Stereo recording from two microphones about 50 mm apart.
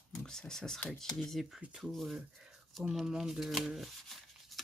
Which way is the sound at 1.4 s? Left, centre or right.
Centre.